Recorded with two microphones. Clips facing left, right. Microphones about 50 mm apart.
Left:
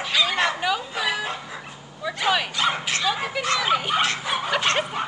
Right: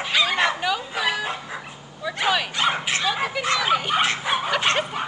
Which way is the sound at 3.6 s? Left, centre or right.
Centre.